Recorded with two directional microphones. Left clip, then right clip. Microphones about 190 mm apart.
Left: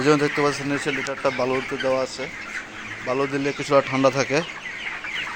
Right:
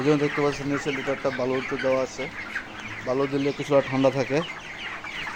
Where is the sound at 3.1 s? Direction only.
Centre (ahead or behind).